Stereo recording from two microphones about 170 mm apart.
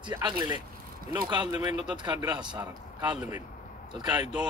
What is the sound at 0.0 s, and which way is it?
Speech, 25° right (ahead or behind).